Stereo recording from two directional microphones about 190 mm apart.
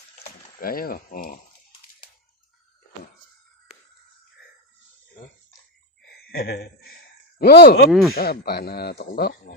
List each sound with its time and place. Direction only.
0.3 s speech: 50° left (ahead or behind)
6.1 s a sound: 55° left (ahead or behind)
7.3 s speech: 55° left (ahead or behind)
7.9 s speech: centre (ahead or behind)
8.1 s speech: 55° left (ahead or behind)